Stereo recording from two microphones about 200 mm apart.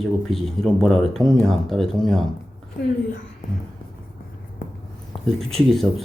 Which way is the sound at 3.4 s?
40° left (ahead or behind).